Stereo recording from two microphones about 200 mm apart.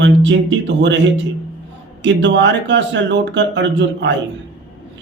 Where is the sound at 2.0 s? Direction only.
65° right (ahead or behind).